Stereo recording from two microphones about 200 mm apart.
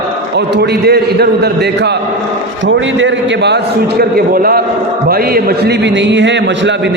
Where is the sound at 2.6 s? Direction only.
70° right (ahead or behind).